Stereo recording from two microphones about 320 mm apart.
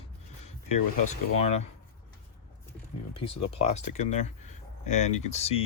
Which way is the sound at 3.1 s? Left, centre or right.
Centre.